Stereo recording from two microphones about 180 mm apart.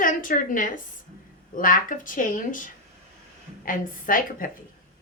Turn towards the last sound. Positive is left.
turn(degrees=50)  # may be behind; listen again after turning